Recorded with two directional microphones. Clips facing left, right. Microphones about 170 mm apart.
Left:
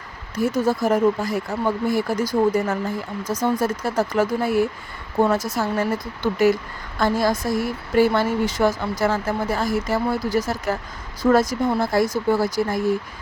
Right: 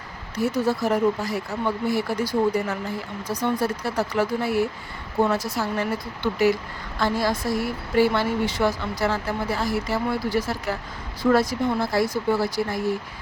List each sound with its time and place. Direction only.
0.3 s speech: 45° left (ahead or behind)